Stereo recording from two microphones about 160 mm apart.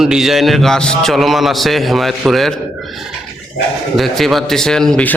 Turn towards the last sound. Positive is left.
turn(degrees=5)  # may be behind; listen again after turning